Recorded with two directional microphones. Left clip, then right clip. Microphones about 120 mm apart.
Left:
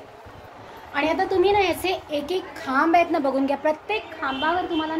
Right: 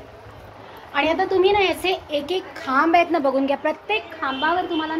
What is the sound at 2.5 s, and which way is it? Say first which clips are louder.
A woman's voice: right 2 dB; 15° left (ahead or behind).